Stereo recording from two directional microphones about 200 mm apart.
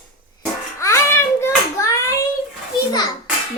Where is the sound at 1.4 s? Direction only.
15° left (ahead or behind).